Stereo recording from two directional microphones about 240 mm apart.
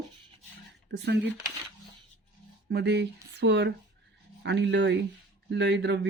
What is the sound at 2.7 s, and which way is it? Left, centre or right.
Speech, right.